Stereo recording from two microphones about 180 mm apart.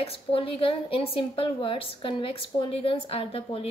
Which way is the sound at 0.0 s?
30° left (ahead or behind).